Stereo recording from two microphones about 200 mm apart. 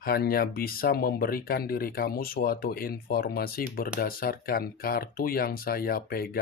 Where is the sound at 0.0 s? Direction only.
50° left (ahead or behind).